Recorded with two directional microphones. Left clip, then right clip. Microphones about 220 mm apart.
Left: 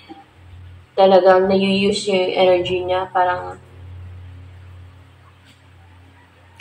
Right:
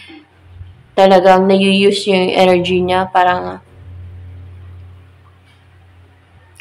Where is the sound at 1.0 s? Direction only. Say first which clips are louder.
Right 3 dB; 50° right (ahead or behind).